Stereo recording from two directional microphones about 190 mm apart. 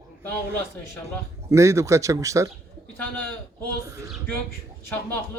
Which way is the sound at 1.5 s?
15° right (ahead or behind).